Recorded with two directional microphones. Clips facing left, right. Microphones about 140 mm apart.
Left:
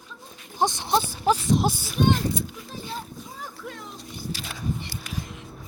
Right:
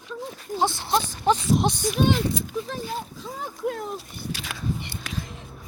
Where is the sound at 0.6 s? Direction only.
15° left (ahead or behind).